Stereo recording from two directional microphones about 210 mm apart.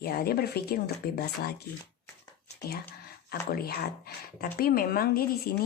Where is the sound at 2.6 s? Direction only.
50° left (ahead or behind).